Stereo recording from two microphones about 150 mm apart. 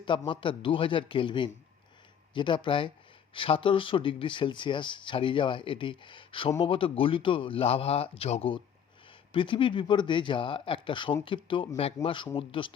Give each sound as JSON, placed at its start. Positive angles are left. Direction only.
{"t": 0.0, "sound": "speech", "side_deg": 35}